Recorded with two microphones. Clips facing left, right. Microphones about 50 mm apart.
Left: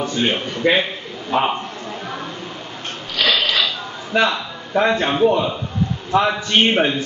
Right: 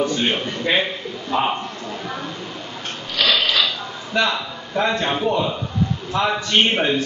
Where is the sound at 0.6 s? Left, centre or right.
Left.